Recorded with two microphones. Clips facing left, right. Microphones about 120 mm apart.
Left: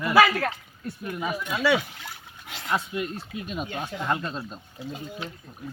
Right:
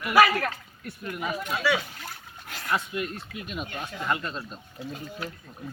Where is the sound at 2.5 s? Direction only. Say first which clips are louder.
Left 1 dB; 20° left (ahead or behind).